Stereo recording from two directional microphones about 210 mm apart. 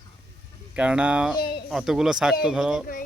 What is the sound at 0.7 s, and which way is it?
Speech, 5° right (ahead or behind).